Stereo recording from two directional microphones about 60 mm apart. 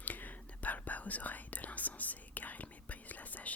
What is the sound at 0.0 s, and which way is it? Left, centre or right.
Whispering, left.